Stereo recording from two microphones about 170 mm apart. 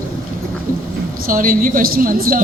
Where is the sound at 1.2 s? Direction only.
55° right (ahead or behind).